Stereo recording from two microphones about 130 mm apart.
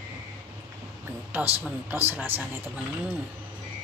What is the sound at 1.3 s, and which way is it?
Speech, 15° right (ahead or behind).